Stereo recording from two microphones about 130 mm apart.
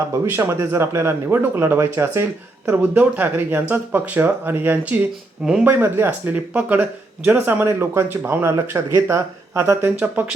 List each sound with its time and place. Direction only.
0.1 s speech: 20° right (ahead or behind)
5.7 s speech: 15° right (ahead or behind)